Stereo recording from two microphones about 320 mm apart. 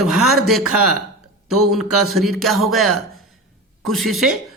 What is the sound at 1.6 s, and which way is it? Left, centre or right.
A woman's voice, centre.